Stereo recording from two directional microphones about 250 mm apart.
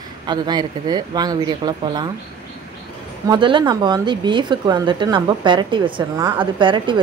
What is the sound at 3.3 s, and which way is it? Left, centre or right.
Speech, centre.